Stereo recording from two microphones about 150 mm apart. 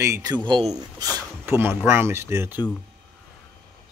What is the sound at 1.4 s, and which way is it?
Speech, 15° right (ahead or behind).